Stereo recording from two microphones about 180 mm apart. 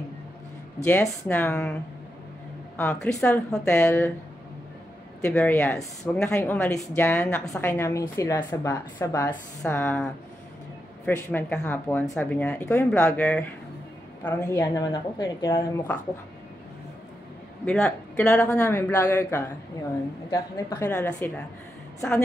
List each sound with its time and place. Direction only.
0.8 s speech: 10° left (ahead or behind)
2.8 s speech: 5° left (ahead or behind)
5.2 s speech: 5° left (ahead or behind)
11.1 s a woman's voice: 10° left (ahead or behind)
17.6 s speech: 10° left (ahead or behind)